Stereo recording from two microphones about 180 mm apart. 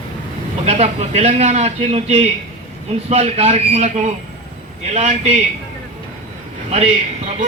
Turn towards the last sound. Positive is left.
turn(degrees=-35)  # may be behind; listen again after turning